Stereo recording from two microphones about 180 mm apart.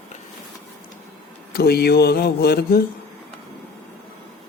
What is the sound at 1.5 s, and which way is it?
Speech, 60° left (ahead or behind).